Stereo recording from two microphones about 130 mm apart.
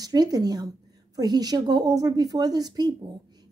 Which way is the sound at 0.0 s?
30° right (ahead or behind).